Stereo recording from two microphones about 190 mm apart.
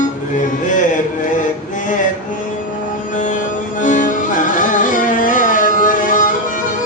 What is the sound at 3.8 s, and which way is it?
Music, 40° left (ahead or behind).